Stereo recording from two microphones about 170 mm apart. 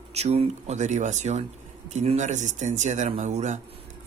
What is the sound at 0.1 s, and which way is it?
Speech, 40° right (ahead or behind).